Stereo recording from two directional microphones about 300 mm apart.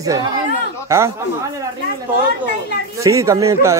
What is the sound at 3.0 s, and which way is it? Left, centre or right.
Speech, centre.